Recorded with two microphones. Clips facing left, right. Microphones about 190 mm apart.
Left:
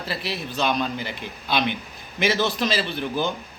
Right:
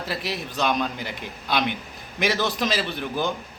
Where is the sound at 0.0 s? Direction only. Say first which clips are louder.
Even; 15° right (ahead or behind).